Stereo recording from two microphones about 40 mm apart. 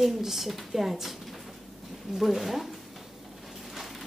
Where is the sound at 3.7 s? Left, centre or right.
Centre.